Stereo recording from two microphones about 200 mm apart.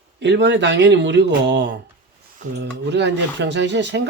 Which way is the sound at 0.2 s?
60° right (ahead or behind).